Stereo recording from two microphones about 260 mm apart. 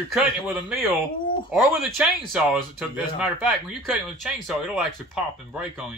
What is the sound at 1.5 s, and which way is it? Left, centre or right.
Speech, centre.